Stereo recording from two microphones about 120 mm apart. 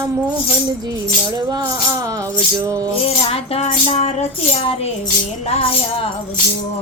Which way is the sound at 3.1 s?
55° left (ahead or behind).